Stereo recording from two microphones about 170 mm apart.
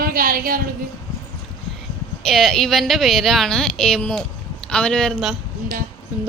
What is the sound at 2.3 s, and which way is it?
A woman's voice, centre (ahead or behind).